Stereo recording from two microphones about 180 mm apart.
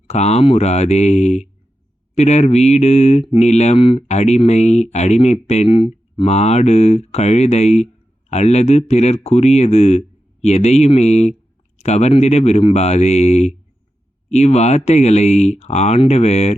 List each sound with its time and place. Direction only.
0.1 s speech: 40° left (ahead or behind)